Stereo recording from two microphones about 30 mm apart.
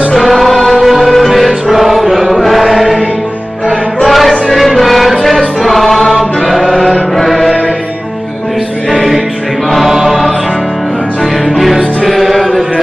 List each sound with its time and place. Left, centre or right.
0.1 s music: centre
4.0 s a sound: centre
5.2 s music: centre
6.8 s music: centre
7.2 s music: centre
9.8 s choir: centre
11.5 s music: centre